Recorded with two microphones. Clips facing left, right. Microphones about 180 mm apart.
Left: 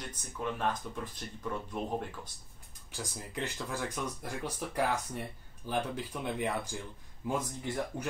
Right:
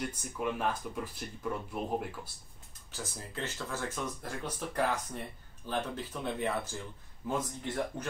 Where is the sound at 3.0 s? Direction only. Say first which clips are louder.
Left 1 dB; 15° left (ahead or behind).